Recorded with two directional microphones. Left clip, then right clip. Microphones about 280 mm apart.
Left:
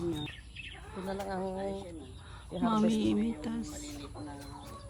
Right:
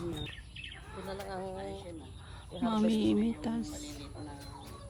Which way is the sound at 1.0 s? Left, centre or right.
Left.